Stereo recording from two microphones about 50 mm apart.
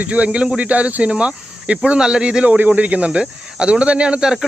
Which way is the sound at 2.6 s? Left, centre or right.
Right.